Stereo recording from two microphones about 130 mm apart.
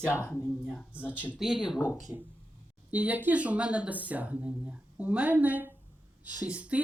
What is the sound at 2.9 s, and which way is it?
Speech, 10° right (ahead or behind).